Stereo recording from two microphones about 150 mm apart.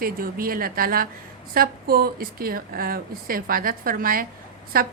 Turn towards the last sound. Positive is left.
turn(degrees=-80)